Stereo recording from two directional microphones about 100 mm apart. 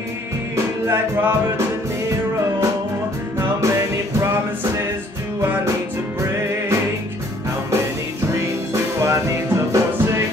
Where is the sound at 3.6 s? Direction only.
30° right (ahead or behind).